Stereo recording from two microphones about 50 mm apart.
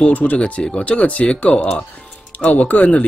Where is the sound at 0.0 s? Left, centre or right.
Left.